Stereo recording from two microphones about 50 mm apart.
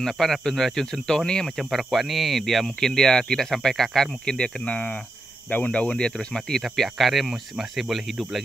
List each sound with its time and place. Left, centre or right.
0.0 s speech: centre
1.6 s speech: centre
4.4 s speech: left
6.6 s speech: centre